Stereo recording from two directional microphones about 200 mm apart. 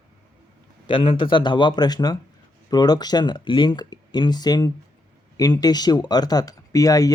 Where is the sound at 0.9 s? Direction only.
25° left (ahead or behind).